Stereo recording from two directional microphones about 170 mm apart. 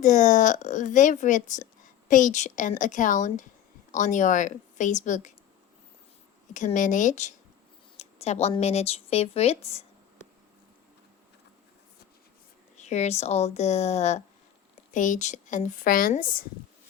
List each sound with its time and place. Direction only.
0.0 s speech: 45° left (ahead or behind)
6.5 s speech: 45° left (ahead or behind)
12.7 s speech: 40° left (ahead or behind)